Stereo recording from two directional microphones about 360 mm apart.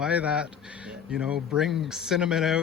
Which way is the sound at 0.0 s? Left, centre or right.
Centre.